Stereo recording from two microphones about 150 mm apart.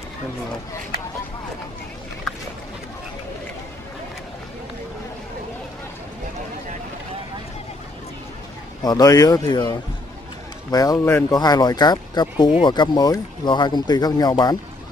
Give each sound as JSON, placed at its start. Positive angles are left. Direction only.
{"t": 8.8, "sound": "speech", "side_deg": 25}